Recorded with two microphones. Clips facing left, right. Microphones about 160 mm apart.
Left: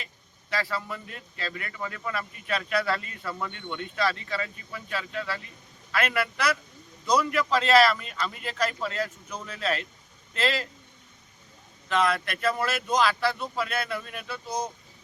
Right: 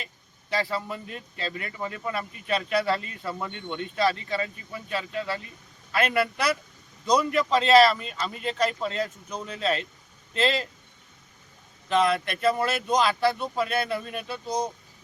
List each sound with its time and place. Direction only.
0.5 s speech: 25° right (ahead or behind)
11.9 s speech: 25° right (ahead or behind)